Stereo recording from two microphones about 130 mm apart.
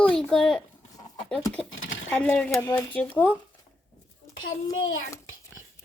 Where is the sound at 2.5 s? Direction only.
25° left (ahead or behind).